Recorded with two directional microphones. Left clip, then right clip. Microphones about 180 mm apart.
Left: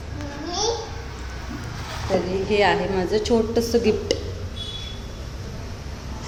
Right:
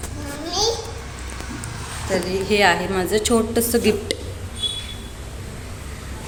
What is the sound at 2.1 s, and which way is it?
A woman's voice, 5° right (ahead or behind).